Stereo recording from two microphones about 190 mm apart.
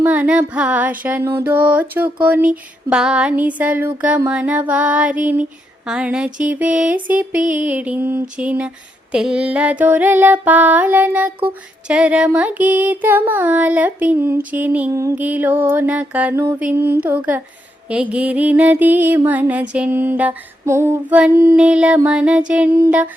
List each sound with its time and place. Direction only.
0.0 s music: 10° right (ahead or behind)